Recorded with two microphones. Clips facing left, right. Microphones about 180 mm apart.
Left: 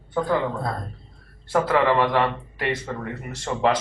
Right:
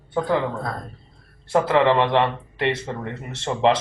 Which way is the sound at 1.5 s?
25° right (ahead or behind).